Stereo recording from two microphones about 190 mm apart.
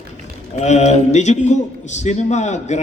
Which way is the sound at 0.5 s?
35° left (ahead or behind).